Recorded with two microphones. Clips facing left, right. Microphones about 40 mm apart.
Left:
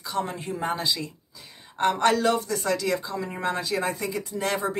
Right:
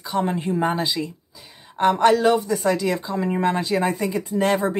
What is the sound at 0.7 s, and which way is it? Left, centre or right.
Speech, centre.